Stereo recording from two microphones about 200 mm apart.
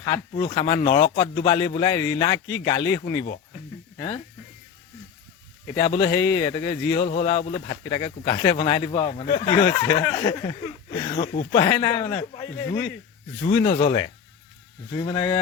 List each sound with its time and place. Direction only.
0.0 s speech: 20° left (ahead or behind)
5.7 s speech: 20° left (ahead or behind)
13.4 s speech: 25° left (ahead or behind)